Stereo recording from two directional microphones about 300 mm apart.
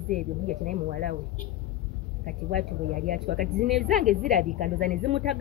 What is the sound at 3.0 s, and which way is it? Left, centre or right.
Speech, right.